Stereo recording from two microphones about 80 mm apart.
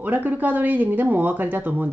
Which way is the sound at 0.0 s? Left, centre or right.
Right.